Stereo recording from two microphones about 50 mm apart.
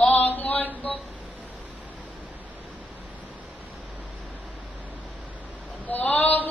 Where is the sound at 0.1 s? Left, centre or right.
Left.